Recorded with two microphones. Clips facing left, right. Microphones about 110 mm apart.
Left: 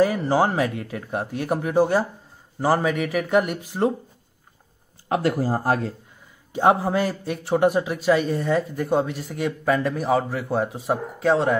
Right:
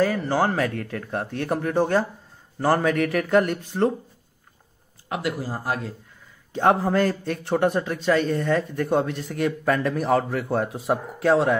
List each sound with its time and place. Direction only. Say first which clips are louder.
0.0 s a man's voice: left 2 dB; 15° left (ahead or behind)
5.0 s speech: left 6 dB; 35° left (ahead or behind)
6.5 s a man's voice: left 1 dB; 10° left (ahead or behind)